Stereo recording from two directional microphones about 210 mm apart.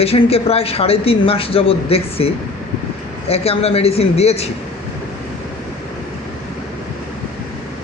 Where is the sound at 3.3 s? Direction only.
30° left (ahead or behind).